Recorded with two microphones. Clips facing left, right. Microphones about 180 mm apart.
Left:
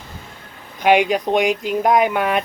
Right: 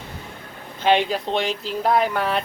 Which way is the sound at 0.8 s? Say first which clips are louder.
Left 4 dB; 15° left (ahead or behind).